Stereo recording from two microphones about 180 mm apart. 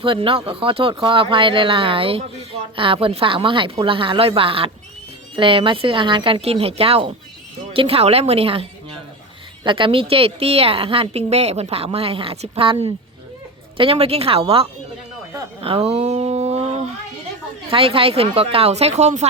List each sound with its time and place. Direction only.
0.0 s a woman's voice: 30° right (ahead or behind)
9.6 s a woman's voice: 30° right (ahead or behind)
15.6 s a sound: 30° right (ahead or behind)
17.7 s a woman's voice: 30° right (ahead or behind)